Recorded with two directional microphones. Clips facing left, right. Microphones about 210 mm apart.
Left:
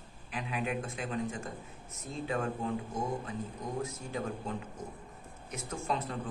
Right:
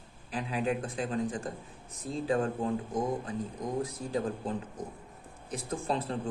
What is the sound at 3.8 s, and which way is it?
Speech, 35° right (ahead or behind).